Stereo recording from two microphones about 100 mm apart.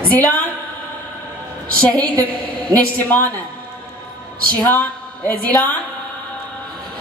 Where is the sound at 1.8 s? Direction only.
10° left (ahead or behind).